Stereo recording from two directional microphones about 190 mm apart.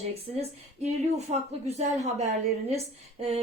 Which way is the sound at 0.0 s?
35° right (ahead or behind).